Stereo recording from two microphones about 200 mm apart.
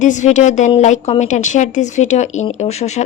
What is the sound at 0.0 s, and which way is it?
Speech, 40° left (ahead or behind).